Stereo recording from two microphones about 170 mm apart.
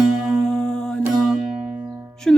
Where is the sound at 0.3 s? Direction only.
5° left (ahead or behind).